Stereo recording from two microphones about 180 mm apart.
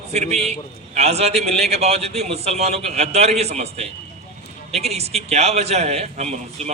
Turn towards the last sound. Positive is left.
turn(degrees=-40)  # may be behind; listen again after turning